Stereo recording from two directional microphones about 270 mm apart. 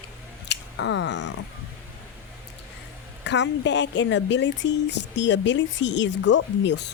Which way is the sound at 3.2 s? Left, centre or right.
Left.